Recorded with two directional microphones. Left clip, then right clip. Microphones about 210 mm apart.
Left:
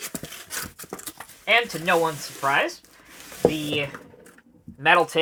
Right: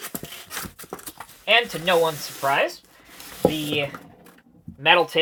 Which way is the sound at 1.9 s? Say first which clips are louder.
Right 2 dB; 25° left (ahead or behind).